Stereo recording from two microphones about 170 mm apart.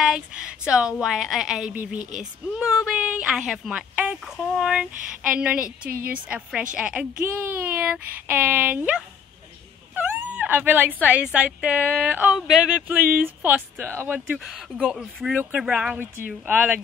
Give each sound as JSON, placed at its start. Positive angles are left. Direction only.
{"t": 0.0, "sound": "speech", "side_deg": -5}
{"t": 2.0, "sound": "speech", "side_deg": -45}
{"t": 2.5, "sound": "speech", "side_deg": -5}